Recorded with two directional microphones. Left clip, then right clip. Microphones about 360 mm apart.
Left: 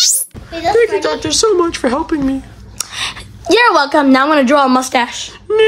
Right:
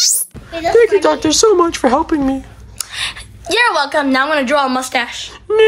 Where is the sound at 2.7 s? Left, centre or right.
Left.